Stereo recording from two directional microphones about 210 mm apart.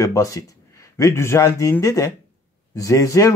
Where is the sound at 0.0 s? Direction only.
15° left (ahead or behind).